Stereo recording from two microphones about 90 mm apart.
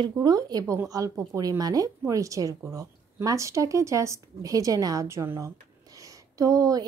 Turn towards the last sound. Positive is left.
turn(degrees=-40)  # may be behind; listen again after turning